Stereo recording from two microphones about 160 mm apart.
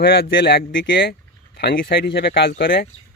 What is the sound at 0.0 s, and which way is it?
Speech, 80° left.